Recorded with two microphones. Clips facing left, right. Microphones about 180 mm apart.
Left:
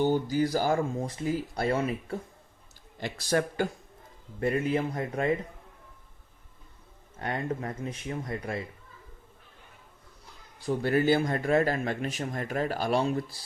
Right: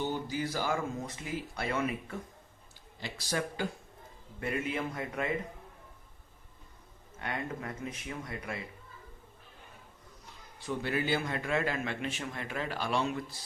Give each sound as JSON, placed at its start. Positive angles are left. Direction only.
{"t": 0.0, "sound": "speech", "side_deg": 40}
{"t": 3.0, "sound": "a man's voice", "side_deg": 50}
{"t": 4.4, "sound": "speech", "side_deg": 35}
{"t": 7.2, "sound": "speech", "side_deg": 40}
{"t": 10.7, "sound": "speech", "side_deg": 45}